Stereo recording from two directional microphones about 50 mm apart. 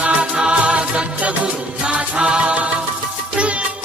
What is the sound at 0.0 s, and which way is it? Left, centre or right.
Music, right.